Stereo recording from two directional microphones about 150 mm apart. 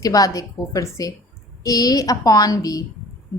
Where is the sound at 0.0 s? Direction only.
25° left (ahead or behind).